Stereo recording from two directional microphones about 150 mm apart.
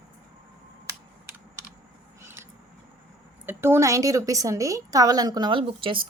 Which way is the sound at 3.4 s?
15° right (ahead or behind).